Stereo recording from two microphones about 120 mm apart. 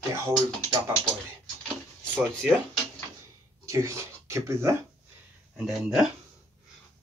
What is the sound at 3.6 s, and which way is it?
Speech, 25° right (ahead or behind).